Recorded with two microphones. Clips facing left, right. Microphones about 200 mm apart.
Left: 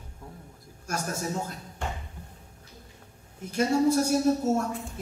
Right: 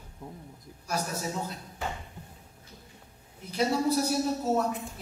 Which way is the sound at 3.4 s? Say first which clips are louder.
Left 4 dB; 50° left (ahead or behind).